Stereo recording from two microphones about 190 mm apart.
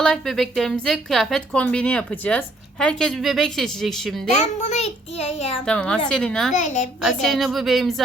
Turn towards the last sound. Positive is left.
turn(degrees=0)  # may be behind; listen again after turning